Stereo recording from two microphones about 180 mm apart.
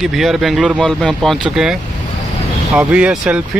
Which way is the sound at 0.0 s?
Centre (ahead or behind).